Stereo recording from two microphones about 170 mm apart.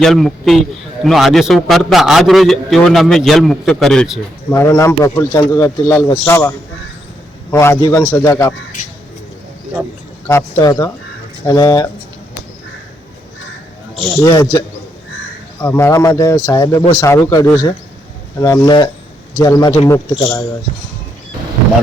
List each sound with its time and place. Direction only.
0.0 s a man's voice: centre (ahead or behind)
4.5 s a man's voice: 15° left (ahead or behind)
7.5 s a man's voice: 15° left (ahead or behind)
10.6 s speech: 20° left (ahead or behind)
14.2 s speech: 20° left (ahead or behind)
15.6 s a man's voice: 15° left (ahead or behind)